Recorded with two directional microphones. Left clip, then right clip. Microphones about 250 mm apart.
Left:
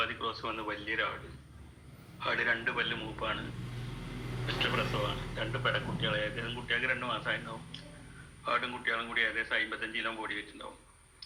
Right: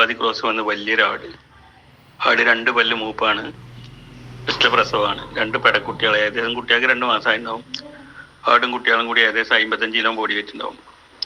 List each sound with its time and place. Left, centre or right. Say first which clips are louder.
0.0 s a man's voice: right 17 dB; right
4.4 s a man's voice: right 16 dB; right